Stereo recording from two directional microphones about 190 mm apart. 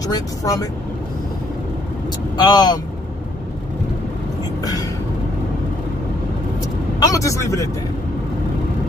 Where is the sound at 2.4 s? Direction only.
20° left (ahead or behind).